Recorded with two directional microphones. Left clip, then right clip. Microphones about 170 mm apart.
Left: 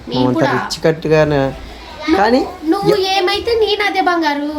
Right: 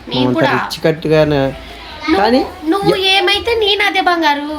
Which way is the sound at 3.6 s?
5° left (ahead or behind).